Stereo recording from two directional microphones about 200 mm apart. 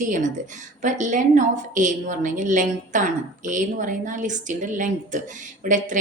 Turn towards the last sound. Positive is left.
turn(degrees=-40)  # may be behind; listen again after turning